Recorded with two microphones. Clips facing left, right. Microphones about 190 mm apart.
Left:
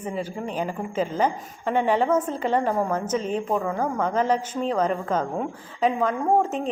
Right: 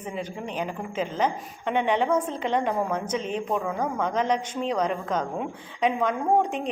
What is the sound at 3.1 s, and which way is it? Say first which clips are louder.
Speech: left 4 dB; 40° left (ahead or behind).